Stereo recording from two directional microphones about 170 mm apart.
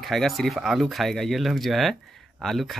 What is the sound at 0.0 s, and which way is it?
Speech, centre (ahead or behind).